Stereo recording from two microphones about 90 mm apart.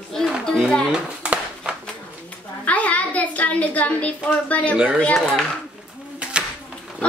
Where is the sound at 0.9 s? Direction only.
10° right (ahead or behind).